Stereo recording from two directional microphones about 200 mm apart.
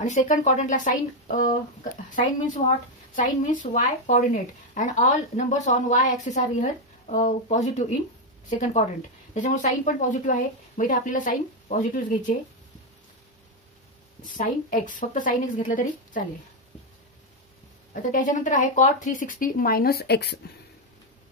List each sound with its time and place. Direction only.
0.0 s speech: 35° left (ahead or behind)
3.7 s speech: 40° left (ahead or behind)
14.2 s speech: 40° left (ahead or behind)
18.1 s speech: 40° left (ahead or behind); by 20.5 s 55° left (ahead or behind)